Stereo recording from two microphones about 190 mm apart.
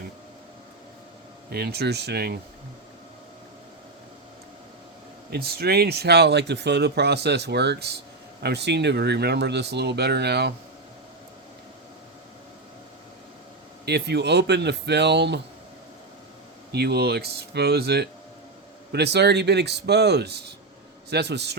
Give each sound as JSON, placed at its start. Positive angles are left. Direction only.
{"t": 1.5, "sound": "speech", "side_deg": -55}
{"t": 5.3, "sound": "speech", "side_deg": -55}
{"t": 13.8, "sound": "speech", "side_deg": -60}
{"t": 16.7, "sound": "speech", "side_deg": -60}